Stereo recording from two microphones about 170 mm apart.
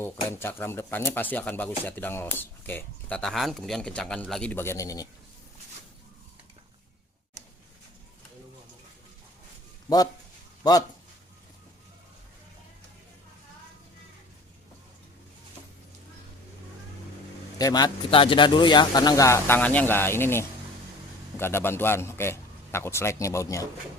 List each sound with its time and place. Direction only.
0.0 s speech: 15° left (ahead or behind)
10.6 s speech: 20° left (ahead or behind)
17.6 s speech: 20° left (ahead or behind)